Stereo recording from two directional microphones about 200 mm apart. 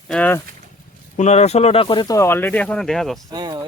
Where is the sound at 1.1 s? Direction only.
35° left (ahead or behind); by 3.2 s centre (ahead or behind).